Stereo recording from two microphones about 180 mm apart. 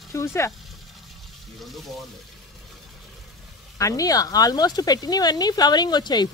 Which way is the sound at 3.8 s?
20° left (ahead or behind).